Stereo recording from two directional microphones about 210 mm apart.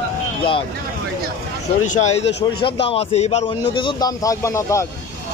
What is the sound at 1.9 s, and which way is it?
A man's voice, 35° left (ahead or behind).